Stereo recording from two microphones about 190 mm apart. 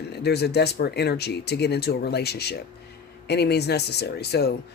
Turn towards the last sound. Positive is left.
turn(degrees=60)  # may be behind; listen again after turning